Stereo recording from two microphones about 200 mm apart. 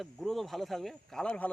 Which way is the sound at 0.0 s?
Centre (ahead or behind).